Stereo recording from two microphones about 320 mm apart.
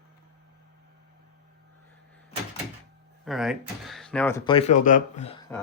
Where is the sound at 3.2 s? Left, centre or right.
Centre.